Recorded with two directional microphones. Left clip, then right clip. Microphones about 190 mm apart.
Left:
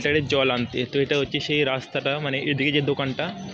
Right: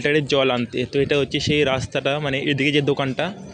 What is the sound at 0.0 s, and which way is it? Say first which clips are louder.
Speech: right 3 dB; 30° right (ahead or behind).